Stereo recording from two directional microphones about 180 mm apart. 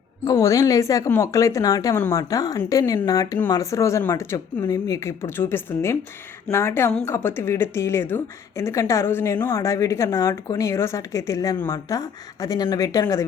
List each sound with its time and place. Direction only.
0.3 s a woman's voice: 20° left (ahead or behind)